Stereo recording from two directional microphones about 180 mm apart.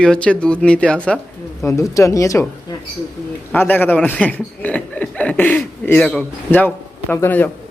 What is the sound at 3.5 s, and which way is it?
A man's voice, 10° left (ahead or behind).